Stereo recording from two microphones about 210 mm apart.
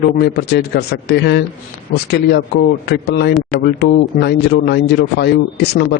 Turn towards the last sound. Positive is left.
turn(degrees=50)  # may be behind; listen again after turning